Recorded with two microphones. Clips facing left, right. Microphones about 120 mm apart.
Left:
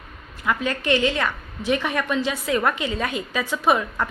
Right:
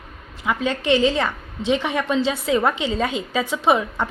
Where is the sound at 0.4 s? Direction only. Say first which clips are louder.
Right 2 dB; 20° right (ahead or behind).